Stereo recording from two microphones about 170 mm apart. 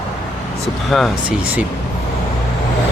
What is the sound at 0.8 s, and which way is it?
Speech, centre (ahead or behind).